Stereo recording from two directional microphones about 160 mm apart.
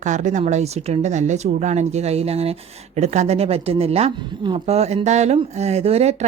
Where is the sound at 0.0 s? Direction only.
50° right (ahead or behind).